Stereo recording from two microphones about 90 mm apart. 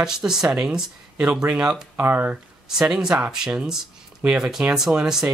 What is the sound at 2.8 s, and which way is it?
Speech, 5° right (ahead or behind).